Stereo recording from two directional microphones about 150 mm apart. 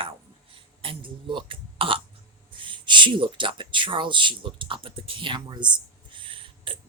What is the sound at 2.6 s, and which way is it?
Speech, 35° right (ahead or behind).